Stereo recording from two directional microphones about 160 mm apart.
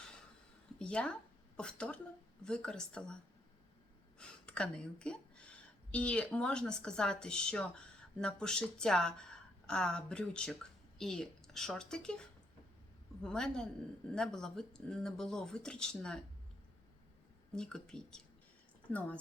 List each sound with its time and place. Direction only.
0.8 s speech: 5° left (ahead or behind)
4.2 s a woman's voice: 5° left (ahead or behind)
17.5 s speech: 5° left (ahead or behind)